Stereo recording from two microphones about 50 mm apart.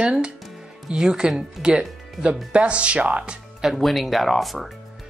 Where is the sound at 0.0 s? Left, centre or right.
Centre.